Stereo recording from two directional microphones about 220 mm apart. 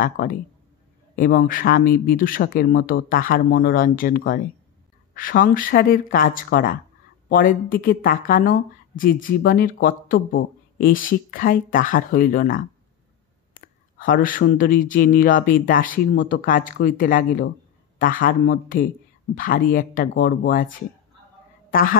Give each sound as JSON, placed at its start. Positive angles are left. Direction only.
{"t": 0.0, "sound": "speech", "side_deg": 40}
{"t": 13.9, "sound": "a woman's voice", "side_deg": 40}